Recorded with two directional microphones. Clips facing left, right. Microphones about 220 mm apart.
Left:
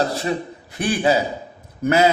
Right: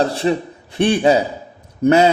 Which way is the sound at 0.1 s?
30° right (ahead or behind).